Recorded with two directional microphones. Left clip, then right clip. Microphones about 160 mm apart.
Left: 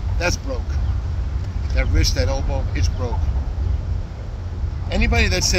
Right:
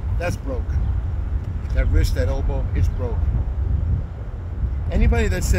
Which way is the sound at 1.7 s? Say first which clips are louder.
Left 4 dB; 20° right (ahead or behind).